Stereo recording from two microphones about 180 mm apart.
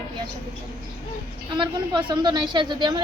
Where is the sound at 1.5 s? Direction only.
25° right (ahead or behind).